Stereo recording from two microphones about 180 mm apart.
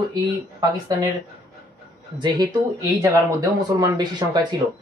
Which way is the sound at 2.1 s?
25° right (ahead or behind).